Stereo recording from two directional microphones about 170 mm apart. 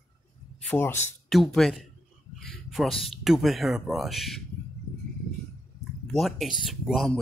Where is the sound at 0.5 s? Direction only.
10° left (ahead or behind).